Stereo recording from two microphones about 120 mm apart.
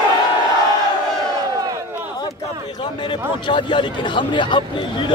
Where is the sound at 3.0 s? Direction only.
40° left (ahead or behind).